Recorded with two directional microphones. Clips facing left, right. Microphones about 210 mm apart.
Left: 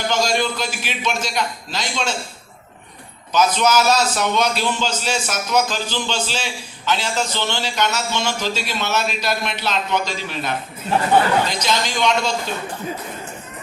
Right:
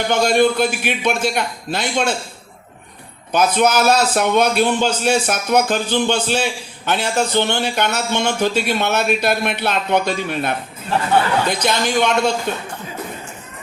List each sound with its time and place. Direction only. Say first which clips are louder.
0.1 s a man's voice: right 7 dB; 60° right (ahead or behind)
3.3 s a man's voice: right 2 dB; 55° right (ahead or behind)